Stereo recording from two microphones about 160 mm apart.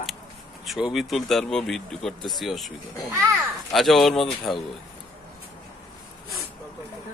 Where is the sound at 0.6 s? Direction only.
5° right (ahead or behind).